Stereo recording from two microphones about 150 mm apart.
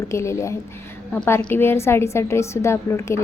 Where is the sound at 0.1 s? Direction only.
20° left (ahead or behind).